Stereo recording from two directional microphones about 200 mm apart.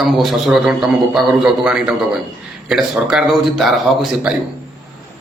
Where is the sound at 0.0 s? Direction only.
Centre (ahead or behind).